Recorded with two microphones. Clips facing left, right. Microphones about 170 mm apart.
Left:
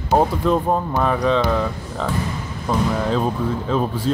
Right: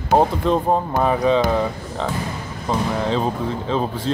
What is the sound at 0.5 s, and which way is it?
Speech, 30° right (ahead or behind).